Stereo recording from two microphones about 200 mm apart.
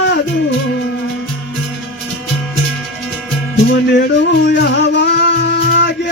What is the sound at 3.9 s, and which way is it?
Music, 55° left (ahead or behind).